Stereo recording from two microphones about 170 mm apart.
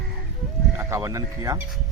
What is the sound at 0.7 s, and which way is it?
Speech, 15° right (ahead or behind).